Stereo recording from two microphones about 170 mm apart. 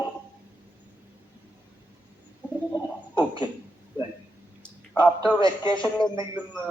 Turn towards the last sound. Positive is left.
turn(degrees=25)  # may be behind; listen again after turning